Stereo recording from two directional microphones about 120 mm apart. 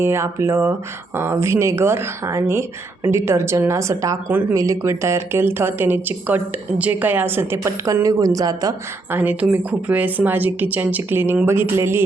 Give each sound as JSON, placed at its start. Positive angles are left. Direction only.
{"t": 0.0, "sound": "speech", "side_deg": -20}
{"t": 9.0, "sound": "a woman's voice", "side_deg": -15}